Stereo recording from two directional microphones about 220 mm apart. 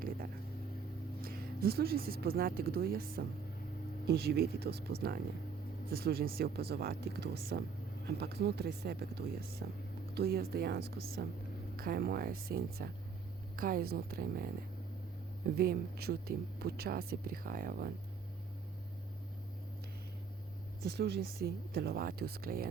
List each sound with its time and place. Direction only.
1.2 s speech: 40° right (ahead or behind)
20.8 s speech: 45° right (ahead or behind)